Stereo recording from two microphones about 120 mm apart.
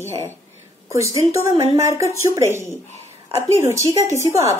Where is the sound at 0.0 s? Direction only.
25° left (ahead or behind).